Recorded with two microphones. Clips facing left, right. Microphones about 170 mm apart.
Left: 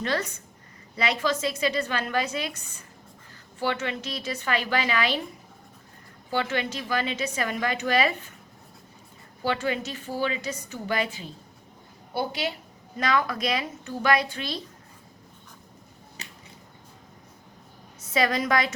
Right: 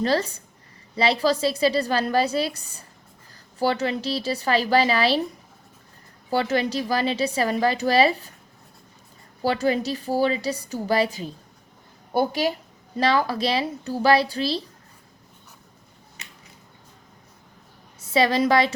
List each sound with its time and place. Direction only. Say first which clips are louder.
0.0 s a woman's voice: right 6 dB; 35° right (ahead or behind)
6.3 s a woman's voice: right 5 dB; 35° right (ahead or behind)
9.4 s a woman's voice: right 5 dB; 35° right (ahead or behind)
16.2 s a sound: left 3 dB; 35° left (ahead or behind)
18.1 s a woman's voice: right 5 dB; 30° right (ahead or behind)